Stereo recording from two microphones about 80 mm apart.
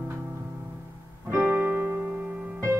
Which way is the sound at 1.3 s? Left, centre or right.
Right.